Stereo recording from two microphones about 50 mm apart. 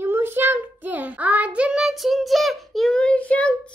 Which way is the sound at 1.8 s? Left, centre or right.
Centre.